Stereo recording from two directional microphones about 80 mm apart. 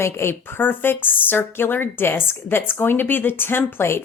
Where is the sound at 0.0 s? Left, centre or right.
Left.